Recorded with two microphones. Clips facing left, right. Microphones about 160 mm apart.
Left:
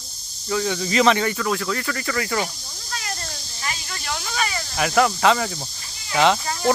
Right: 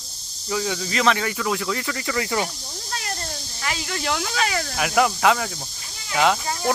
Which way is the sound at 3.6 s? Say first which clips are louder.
Right 5 dB; 75° right (ahead or behind).